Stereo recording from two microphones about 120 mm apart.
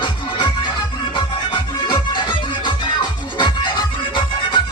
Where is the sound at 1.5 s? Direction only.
40° left (ahead or behind).